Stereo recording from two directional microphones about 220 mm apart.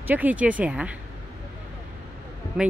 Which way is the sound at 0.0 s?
5° right (ahead or behind).